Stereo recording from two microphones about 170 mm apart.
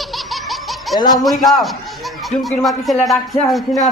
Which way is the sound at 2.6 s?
Centre (ahead or behind).